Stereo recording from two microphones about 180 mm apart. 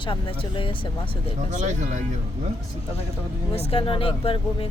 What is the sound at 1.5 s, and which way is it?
Speech, 45° right (ahead or behind).